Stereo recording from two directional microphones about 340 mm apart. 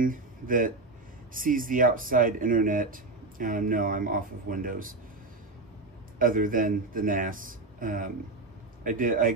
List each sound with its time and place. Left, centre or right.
0.0 s speech: right
6.1 s speech: right